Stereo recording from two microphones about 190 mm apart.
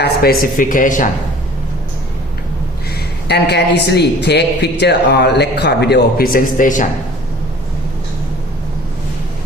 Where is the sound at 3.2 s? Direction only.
60° left (ahead or behind); by 6.8 s 45° left (ahead or behind).